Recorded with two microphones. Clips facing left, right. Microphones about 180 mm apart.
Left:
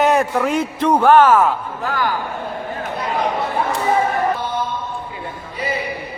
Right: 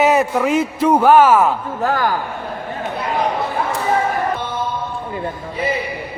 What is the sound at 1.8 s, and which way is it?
Speech, 45° right (ahead or behind).